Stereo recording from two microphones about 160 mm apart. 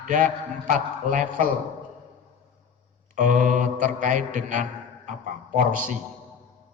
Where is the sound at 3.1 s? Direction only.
55° right (ahead or behind).